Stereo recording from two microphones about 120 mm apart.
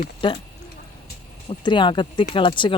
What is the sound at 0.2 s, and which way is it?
Speech, 45° left (ahead or behind).